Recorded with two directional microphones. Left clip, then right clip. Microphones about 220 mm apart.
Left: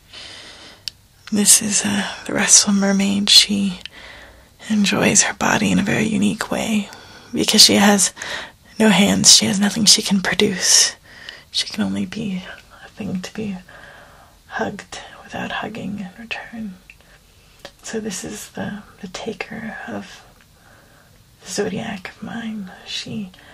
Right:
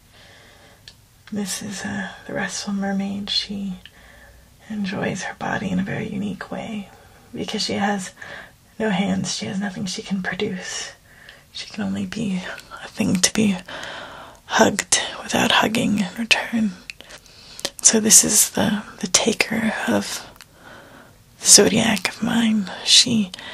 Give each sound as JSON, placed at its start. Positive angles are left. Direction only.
{"t": 1.3, "sound": "speech", "side_deg": 30}
{"t": 11.5, "sound": "speech", "side_deg": 15}
{"t": 12.1, "sound": "speech", "side_deg": 0}
{"t": 12.7, "sound": "speech", "side_deg": -25}
{"t": 18.5, "sound": "speech", "side_deg": -30}
{"t": 21.5, "sound": "speech", "side_deg": -30}